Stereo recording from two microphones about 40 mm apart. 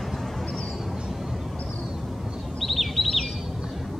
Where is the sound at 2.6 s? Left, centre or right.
Centre.